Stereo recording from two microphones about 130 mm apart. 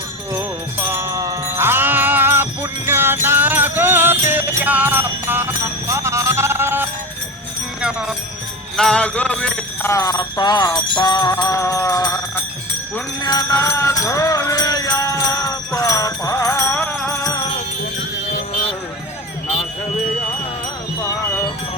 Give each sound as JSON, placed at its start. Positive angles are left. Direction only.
{"t": 0.3, "sound": "music", "side_deg": -20}
{"t": 7.8, "sound": "music", "side_deg": -5}
{"t": 8.7, "sound": "speech", "side_deg": 5}
{"t": 9.8, "sound": "music", "side_deg": 25}
{"t": 13.2, "sound": "music", "side_deg": 30}